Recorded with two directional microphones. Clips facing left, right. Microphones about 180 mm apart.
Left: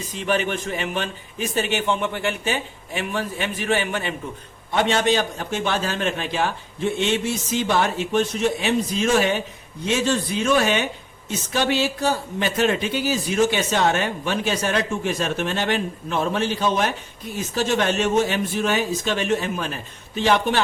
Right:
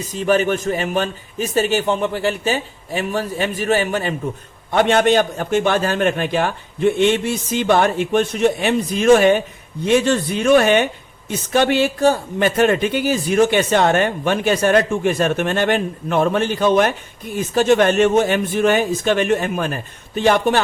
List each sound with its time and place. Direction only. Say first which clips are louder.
0.1 s a man's voice: right 6 dB; 40° right (ahead or behind)
4.7 s a man's voice: right 5 dB; 55° right (ahead or behind)